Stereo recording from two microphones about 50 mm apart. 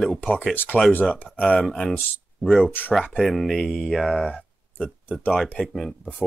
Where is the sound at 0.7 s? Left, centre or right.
Left.